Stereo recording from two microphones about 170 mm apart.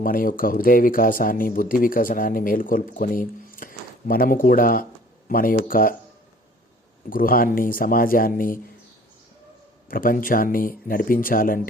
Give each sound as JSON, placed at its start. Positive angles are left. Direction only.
{"t": 0.0, "sound": "speech", "side_deg": 55}
{"t": 7.1, "sound": "speech", "side_deg": 55}
{"t": 9.9, "sound": "speech", "side_deg": 55}